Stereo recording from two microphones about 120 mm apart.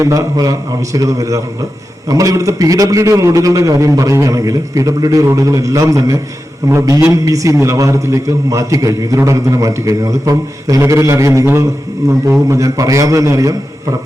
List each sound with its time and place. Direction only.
0.0 s a man's voice: 25° right (ahead or behind)